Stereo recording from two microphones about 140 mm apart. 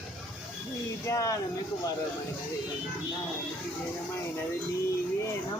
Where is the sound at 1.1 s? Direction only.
25° left (ahead or behind).